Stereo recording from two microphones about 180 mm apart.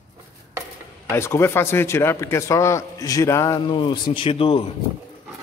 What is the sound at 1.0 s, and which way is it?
A man's voice, 15° left (ahead or behind).